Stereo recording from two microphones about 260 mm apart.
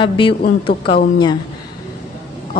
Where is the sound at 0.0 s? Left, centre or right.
Centre.